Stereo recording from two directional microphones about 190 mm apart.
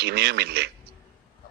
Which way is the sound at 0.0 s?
60° right (ahead or behind).